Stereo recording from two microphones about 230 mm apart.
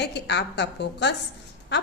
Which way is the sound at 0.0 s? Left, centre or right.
Left.